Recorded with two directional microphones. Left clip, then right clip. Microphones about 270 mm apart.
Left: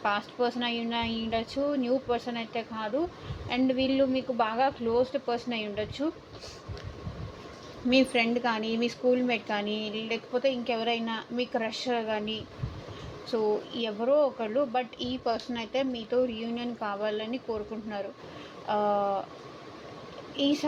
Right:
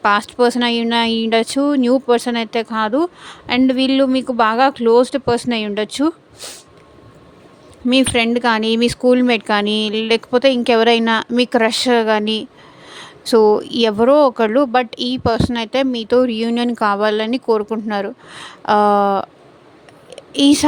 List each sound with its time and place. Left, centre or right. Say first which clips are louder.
0.0 s speech: right 14 dB; right
7.9 s speech: right 10 dB; right
20.3 s speech: right 15 dB; right